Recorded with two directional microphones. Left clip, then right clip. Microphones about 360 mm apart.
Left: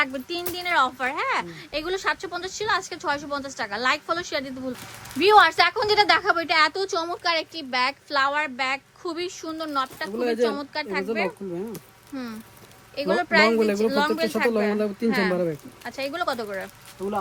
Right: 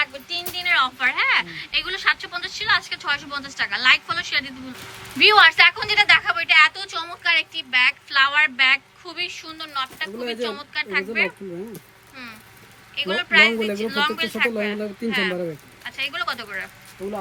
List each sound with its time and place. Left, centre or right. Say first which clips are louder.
0.7 s a woman's voice: right 3 dB; centre
13.0 s a woman's voice: right 3 dB; centre